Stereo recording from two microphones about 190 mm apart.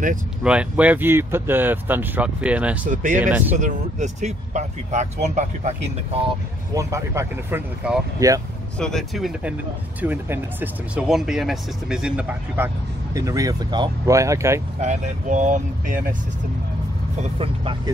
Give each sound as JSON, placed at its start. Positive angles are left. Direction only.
{"t": 0.4, "sound": "speech", "side_deg": -5}
{"t": 2.9, "sound": "speech", "side_deg": -40}
{"t": 3.2, "sound": "speech", "side_deg": -10}
{"t": 3.5, "sound": "speech", "side_deg": -40}
{"t": 6.7, "sound": "speech", "side_deg": -15}
{"t": 8.7, "sound": "speech", "side_deg": 5}
{"t": 14.8, "sound": "speech", "side_deg": -40}
{"t": 17.2, "sound": "speech", "side_deg": -30}